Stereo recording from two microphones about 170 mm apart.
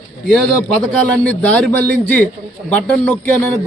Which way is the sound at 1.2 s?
10° left (ahead or behind).